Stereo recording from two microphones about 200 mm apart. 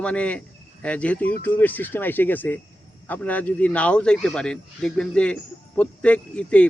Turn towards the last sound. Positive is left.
turn(degrees=5)  # may be behind; listen again after turning